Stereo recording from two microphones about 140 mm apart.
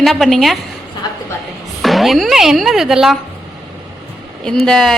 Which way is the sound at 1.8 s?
Centre (ahead or behind).